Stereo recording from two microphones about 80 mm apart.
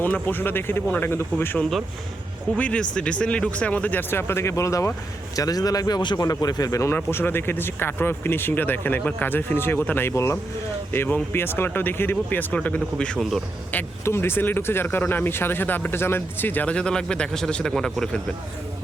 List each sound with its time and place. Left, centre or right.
0.0 s speech: left
2.6 s a man's voice: centre; by 6.0 s left
6.0 s a man's voice: left
6.2 s a man's voice: left
6.9 s speech: left
13.7 s speech: left; by 18.2 s centre